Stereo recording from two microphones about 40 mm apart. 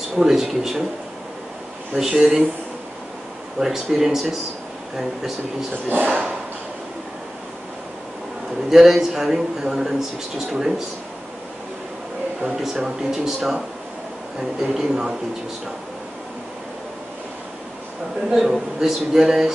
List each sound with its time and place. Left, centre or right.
0.1 s a man's voice: centre
2.0 s a man's voice: centre
2.2 s speech: right
3.5 s a man's voice: centre
5.9 s speech: right
8.6 s a man's voice: centre
12.8 s a man's voice: centre
18.3 s a man's voice: centre